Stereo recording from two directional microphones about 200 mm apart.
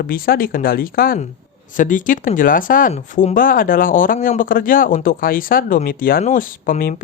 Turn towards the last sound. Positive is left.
turn(degrees=45)  # may be behind; listen again after turning